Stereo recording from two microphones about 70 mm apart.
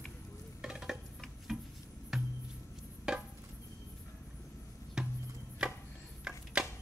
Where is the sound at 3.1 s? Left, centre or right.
Centre.